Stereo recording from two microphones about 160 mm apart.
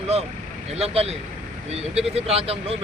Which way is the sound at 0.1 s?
40° right (ahead or behind).